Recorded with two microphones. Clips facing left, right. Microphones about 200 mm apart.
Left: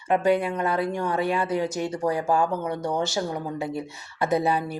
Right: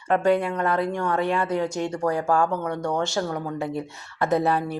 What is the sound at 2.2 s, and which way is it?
Speech, 20° left (ahead or behind).